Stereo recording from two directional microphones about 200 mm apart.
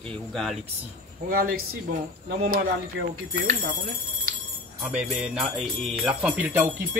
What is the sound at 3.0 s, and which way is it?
Speech, 65° right (ahead or behind).